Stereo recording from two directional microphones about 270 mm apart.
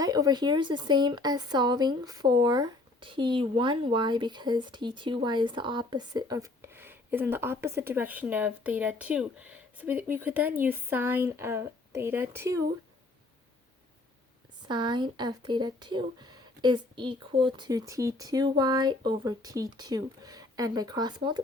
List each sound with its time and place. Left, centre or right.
0.0 s speech: centre
14.7 s speech: centre